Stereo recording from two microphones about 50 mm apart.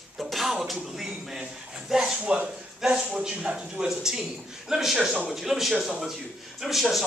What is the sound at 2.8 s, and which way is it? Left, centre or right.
A man's voice, centre.